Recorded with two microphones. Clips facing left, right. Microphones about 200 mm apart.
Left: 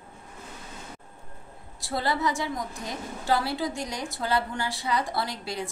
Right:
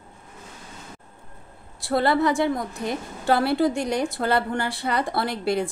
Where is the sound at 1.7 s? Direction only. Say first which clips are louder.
Right 8 dB; 60° right (ahead or behind).